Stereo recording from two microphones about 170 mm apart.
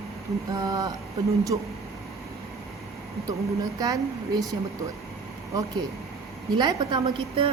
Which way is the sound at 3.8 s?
20° right (ahead or behind).